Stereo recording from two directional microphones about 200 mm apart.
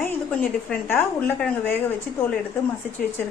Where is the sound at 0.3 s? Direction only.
10° left (ahead or behind).